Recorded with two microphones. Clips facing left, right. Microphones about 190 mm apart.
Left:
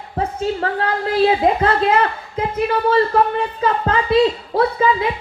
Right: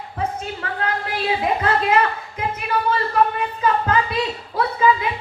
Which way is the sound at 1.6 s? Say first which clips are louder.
Left 3 dB; 30° left (ahead or behind).